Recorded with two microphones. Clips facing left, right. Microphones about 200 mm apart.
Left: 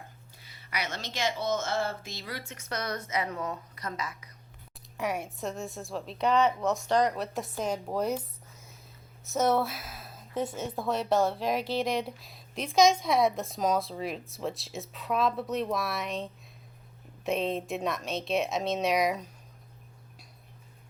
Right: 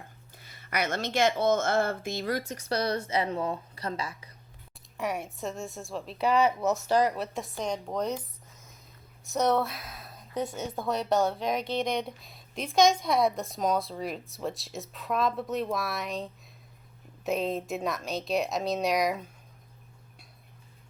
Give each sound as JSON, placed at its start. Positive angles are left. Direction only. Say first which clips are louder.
{"t": 0.3, "sound": "speech", "louder": "right 5 dB", "side_deg": -50}
{"t": 4.9, "sound": "a woman's voice", "louder": "even", "side_deg": 0}
{"t": 9.3, "sound": "a woman's voice", "louder": "even", "side_deg": 0}